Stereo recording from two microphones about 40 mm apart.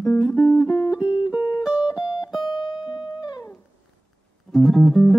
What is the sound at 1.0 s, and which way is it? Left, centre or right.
Music, right.